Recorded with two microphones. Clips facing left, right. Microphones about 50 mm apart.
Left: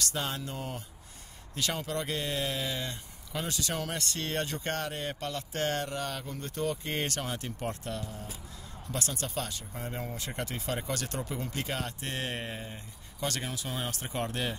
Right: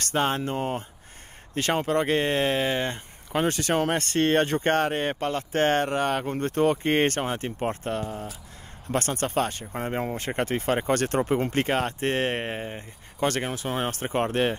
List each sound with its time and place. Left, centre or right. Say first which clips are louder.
0.0 s speech: right 9 dB; right